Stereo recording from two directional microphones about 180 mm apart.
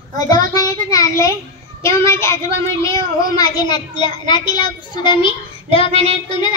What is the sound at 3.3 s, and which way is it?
A child's voice, 25° left (ahead or behind).